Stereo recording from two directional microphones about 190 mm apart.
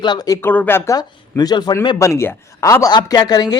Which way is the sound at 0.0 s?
20° left (ahead or behind).